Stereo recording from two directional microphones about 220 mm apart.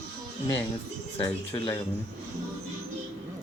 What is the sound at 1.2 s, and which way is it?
Speech, 20° left (ahead or behind).